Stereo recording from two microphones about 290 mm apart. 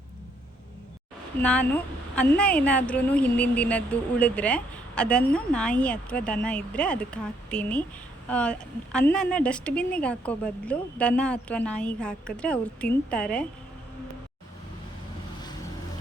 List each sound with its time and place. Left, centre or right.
1.4 s a woman's voice: centre